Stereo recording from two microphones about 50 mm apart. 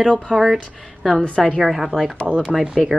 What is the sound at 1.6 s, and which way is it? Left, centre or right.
Speech, centre.